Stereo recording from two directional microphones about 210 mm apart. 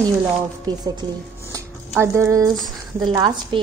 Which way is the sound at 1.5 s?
15° right (ahead or behind).